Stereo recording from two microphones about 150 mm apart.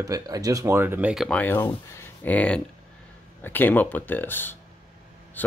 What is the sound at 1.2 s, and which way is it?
Speech, 10° left (ahead or behind).